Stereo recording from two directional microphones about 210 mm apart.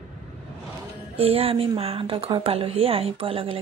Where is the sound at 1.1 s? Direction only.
25° right (ahead or behind).